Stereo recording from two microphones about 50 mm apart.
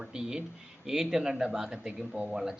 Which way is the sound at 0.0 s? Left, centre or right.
Centre.